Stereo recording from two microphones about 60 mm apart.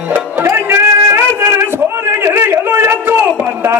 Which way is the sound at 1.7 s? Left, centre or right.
Right.